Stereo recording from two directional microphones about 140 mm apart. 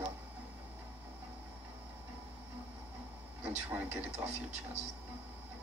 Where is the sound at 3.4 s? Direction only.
10° right (ahead or behind).